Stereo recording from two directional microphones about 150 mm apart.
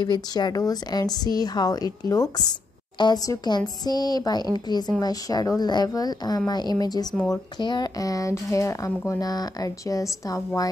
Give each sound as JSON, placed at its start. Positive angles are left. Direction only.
{"t": 0.0, "sound": "speech", "side_deg": 30}